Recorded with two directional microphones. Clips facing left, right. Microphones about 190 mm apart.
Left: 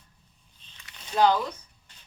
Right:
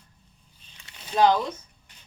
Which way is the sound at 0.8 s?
20° right (ahead or behind).